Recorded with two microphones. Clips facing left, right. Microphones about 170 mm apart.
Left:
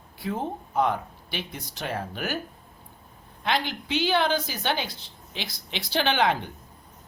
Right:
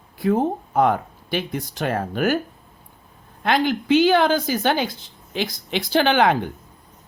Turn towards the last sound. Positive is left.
turn(degrees=-50)  # may be behind; listen again after turning